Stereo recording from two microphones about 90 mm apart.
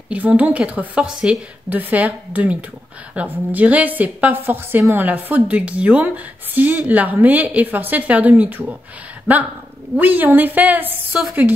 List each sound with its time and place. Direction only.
0.1 s a woman's voice: 15° right (ahead or behind)
1.7 s a woman's voice: 20° right (ahead or behind)
9.9 s a woman's voice: 20° right (ahead or behind)